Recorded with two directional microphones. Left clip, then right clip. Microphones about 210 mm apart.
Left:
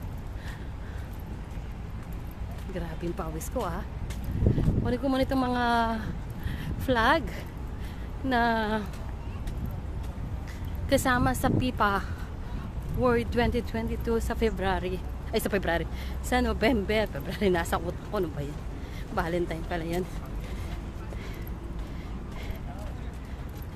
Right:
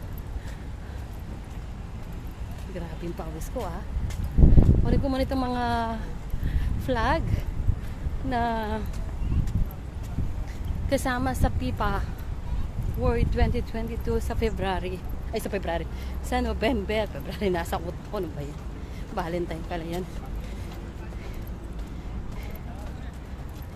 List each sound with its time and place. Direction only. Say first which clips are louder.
2.7 s speech: left 2 dB; 20° left (ahead or behind)
4.8 s speech: even; 10° left (ahead or behind)
10.9 s speech: left 2 dB; 15° left (ahead or behind)
13.0 s speech: left 2 dB; 20° left (ahead or behind)
15.3 s speech: left 2 dB; 20° left (ahead or behind)